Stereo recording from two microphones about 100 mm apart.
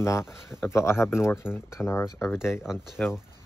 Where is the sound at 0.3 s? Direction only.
5° right (ahead or behind).